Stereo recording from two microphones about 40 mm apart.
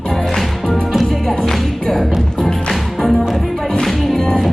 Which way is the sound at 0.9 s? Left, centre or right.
Centre.